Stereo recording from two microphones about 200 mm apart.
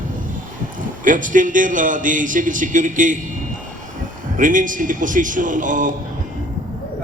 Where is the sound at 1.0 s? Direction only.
40° right (ahead or behind).